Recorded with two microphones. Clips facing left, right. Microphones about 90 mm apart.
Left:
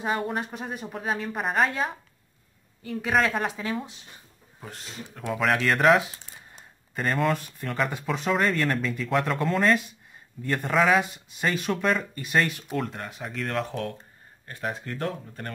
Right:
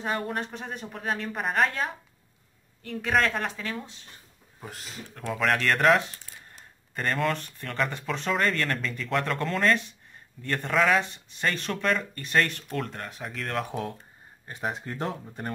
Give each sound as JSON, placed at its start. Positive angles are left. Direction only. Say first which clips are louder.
{"t": 0.0, "sound": "speech", "louder": "left 2 dB", "side_deg": 5}
{"t": 4.6, "sound": "speech", "louder": "left 1 dB", "side_deg": 0}
{"t": 13.7, "sound": "speech", "louder": "left 1 dB", "side_deg": -15}